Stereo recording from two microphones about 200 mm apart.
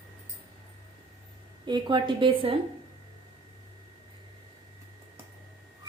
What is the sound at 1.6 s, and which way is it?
Speech, 20° right (ahead or behind).